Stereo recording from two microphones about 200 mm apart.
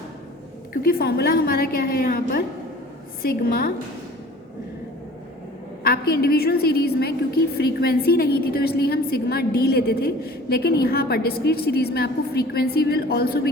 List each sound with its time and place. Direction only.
0.7 s a woman's voice: 45° left (ahead or behind)
5.8 s a woman's voice: 50° left (ahead or behind)